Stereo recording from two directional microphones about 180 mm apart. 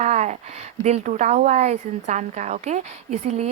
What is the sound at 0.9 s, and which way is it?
A woman's voice, 40° right (ahead or behind).